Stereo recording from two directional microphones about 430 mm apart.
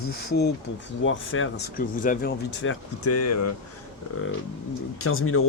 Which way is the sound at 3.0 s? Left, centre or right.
Left.